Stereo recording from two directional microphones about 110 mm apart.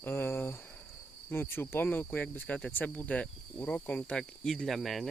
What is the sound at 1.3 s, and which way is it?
Cricket, 20° left (ahead or behind).